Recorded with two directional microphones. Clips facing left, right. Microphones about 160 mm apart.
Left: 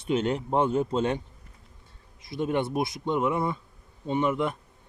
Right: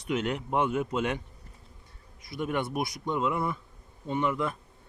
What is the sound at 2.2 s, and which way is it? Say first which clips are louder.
Speech: left 4 dB; 25° left (ahead or behind).